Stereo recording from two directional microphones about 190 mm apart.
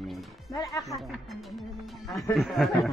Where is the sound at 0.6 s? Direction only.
15° left (ahead or behind).